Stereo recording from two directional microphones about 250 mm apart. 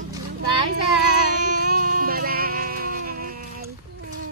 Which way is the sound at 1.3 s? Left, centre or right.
Right.